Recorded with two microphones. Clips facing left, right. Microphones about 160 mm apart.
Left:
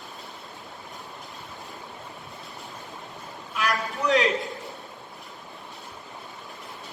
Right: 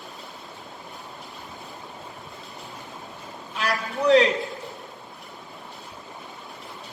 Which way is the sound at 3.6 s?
35° right (ahead or behind).